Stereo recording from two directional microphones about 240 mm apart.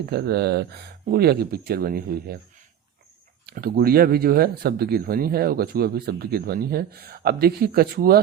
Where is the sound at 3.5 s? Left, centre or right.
Right.